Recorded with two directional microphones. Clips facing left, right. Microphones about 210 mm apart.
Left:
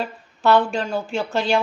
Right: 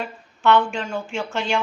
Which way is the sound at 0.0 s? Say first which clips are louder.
Left 1 dB; 35° left (ahead or behind).